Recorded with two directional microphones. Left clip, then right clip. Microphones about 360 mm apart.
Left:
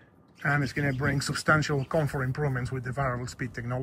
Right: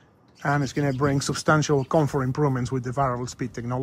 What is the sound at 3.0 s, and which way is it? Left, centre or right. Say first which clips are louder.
Speech: right 6 dB; centre.